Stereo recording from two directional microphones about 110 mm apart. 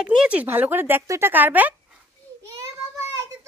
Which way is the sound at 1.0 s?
30° right (ahead or behind).